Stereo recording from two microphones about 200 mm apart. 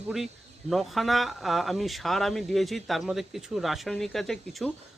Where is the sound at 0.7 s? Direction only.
Centre (ahead or behind).